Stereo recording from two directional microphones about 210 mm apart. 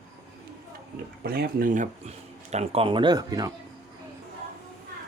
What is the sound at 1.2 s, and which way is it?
Speech, 45° right (ahead or behind).